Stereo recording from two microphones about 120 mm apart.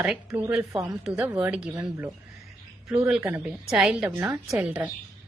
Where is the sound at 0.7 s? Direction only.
25° right (ahead or behind).